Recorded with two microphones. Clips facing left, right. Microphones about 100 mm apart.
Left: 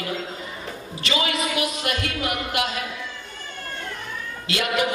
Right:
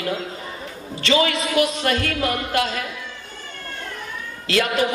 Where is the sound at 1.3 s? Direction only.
30° right (ahead or behind).